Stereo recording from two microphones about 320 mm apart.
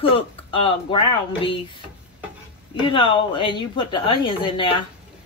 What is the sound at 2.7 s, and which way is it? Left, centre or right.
A man's voice, centre.